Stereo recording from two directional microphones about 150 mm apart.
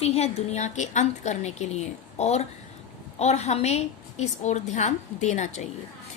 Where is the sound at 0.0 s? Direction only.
45° left (ahead or behind).